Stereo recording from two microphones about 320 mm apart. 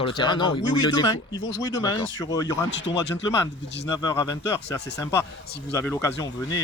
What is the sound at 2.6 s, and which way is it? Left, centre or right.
Speech, left.